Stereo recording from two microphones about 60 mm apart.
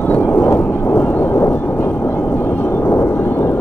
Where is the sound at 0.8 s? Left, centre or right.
Left.